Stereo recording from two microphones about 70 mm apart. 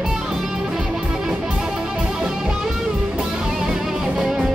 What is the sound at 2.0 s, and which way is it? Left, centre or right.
Music, centre.